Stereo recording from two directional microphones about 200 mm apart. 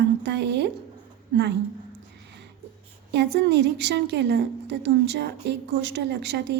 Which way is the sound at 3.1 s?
55° right (ahead or behind).